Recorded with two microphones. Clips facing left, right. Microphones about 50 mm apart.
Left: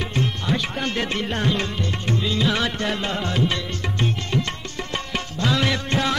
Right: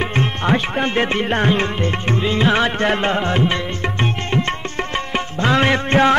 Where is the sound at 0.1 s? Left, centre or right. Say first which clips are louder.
Right 6 dB; right.